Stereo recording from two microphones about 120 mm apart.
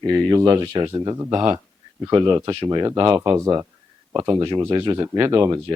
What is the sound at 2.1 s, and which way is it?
Speech, 45° right (ahead or behind).